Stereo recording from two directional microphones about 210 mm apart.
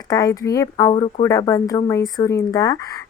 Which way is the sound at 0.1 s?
15° left (ahead or behind).